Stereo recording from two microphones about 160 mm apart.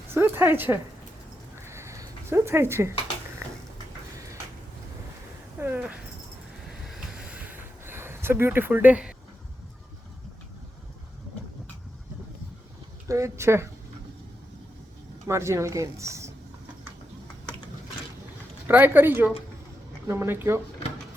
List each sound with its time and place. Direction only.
0.1 s a sound: 15° right (ahead or behind)
5.5 s speech: 15° right (ahead or behind)
6.8 s a sound: 5° right (ahead or behind)
13.1 s speech: 20° right (ahead or behind)
15.3 s speech: 15° right (ahead or behind)
18.7 s speech: 10° right (ahead or behind)